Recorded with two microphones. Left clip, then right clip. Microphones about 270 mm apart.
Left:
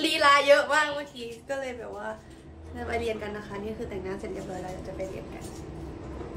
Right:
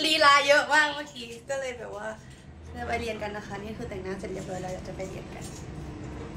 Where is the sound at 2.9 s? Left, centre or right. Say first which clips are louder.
Left 1 dB; centre.